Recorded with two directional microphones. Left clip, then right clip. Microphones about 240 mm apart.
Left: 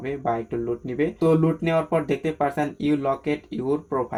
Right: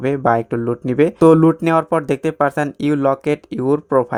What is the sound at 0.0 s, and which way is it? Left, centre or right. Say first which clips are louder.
Speech: right 10 dB; right.